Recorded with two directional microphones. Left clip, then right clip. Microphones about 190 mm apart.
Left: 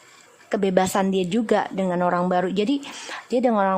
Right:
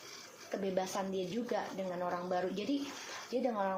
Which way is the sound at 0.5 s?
55° left (ahead or behind).